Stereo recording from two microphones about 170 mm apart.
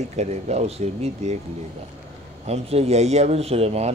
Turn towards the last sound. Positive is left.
turn(degrees=-40)  # may be behind; listen again after turning